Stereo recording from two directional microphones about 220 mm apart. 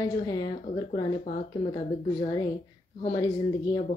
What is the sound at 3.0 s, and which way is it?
Speech, 20° left (ahead or behind).